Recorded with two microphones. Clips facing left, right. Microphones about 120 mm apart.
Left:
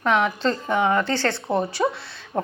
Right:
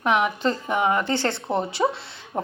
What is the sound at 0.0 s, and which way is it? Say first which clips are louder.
Speech: left 1 dB; 15° right (ahead or behind).